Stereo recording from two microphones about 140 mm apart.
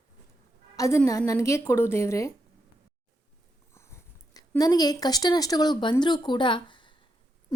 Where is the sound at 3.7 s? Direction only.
20° left (ahead or behind).